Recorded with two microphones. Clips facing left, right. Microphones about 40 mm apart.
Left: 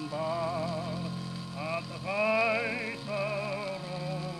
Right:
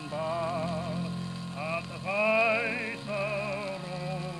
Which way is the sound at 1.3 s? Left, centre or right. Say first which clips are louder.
Right 1 dB; centre.